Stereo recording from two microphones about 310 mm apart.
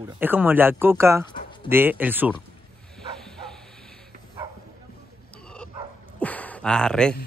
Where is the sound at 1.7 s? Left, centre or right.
Centre.